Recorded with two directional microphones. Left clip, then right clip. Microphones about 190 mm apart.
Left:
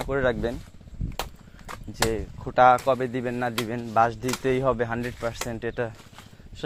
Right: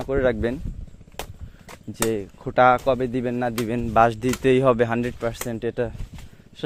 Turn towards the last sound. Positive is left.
turn(degrees=-35)  # may be behind; listen again after turning